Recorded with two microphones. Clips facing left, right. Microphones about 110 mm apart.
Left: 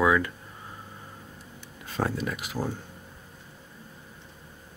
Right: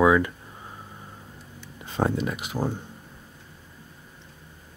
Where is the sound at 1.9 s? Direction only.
20° right (ahead or behind).